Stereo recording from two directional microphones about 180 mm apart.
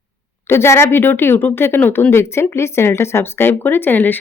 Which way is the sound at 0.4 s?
15° left (ahead or behind).